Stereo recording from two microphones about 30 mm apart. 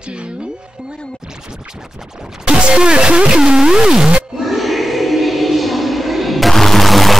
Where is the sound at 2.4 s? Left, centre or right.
Right.